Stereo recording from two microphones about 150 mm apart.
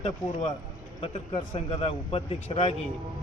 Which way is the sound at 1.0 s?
40° left (ahead or behind).